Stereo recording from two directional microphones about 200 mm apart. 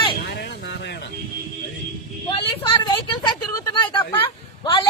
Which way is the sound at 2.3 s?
25° left (ahead or behind).